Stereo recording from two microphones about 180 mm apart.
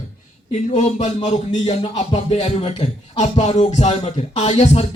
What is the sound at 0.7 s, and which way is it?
Speech, 40° left (ahead or behind).